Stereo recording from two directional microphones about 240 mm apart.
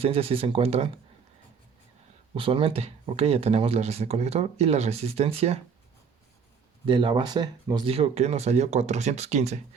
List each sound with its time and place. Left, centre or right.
0.0 s speech: right
2.3 s speech: right
6.8 s speech: right